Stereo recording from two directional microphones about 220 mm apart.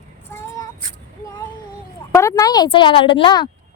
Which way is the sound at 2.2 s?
15° left (ahead or behind).